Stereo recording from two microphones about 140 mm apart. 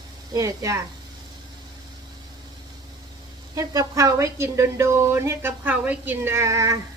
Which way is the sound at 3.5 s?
25° right (ahead or behind).